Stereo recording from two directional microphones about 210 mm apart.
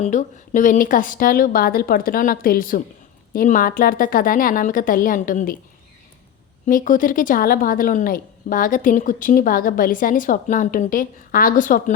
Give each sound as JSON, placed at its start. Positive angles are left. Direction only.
{"t": 0.0, "sound": "a woman's voice", "side_deg": 35}
{"t": 6.7, "sound": "a woman's voice", "side_deg": 40}